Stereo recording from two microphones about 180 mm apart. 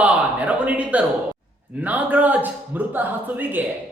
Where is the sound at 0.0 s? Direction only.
10° right (ahead or behind).